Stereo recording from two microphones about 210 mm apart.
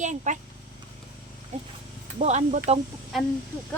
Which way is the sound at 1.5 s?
35° right (ahead or behind).